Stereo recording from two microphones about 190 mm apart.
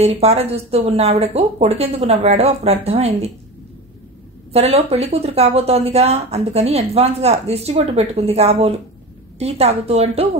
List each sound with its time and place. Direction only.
0.2 s speech: 35° right (ahead or behind)
4.5 s speech: 35° right (ahead or behind)